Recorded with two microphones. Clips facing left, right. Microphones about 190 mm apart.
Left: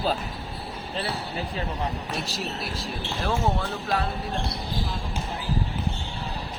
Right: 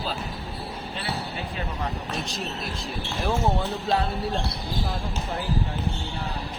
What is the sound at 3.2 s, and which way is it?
Speech, 20° right (ahead or behind).